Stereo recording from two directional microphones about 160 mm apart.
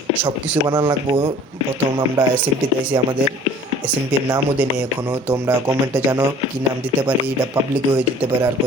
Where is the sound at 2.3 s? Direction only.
10° right (ahead or behind).